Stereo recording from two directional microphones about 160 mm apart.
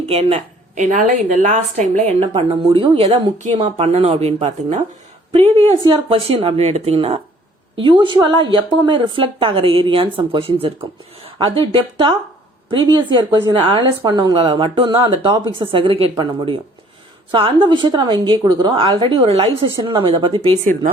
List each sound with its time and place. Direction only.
0.1 s a woman's voice: 40° right (ahead or behind)